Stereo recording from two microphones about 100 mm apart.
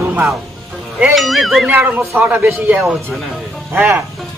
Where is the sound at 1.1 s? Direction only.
Centre (ahead or behind).